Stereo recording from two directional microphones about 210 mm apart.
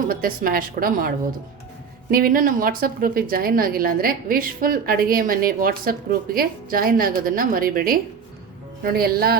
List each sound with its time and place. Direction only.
0.1 s a woman's voice: 40° right (ahead or behind)